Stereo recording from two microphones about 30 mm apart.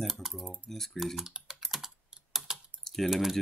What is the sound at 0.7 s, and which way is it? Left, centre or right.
Speech, centre.